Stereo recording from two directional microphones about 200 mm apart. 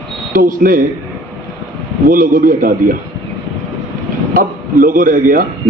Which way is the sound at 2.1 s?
45° right (ahead or behind).